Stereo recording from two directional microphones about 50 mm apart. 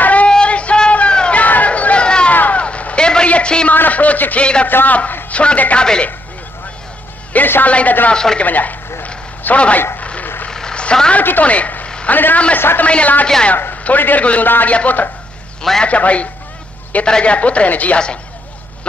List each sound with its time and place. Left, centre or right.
0.0 s a sound: left
1.4 s a sound: left
2.3 s a sound: left
3.7 s a man's voice: left
7.3 s a man's voice: left
7.6 s a man's voice: left
8.1 s speech: centre
8.4 s a man's voice: left
9.9 s vehicle: left
10.5 s vehicle: centre
11.1 s a woman's voice: left
12.1 s a man's voice: left
12.8 s a man's voice: left
17.9 s speech: centre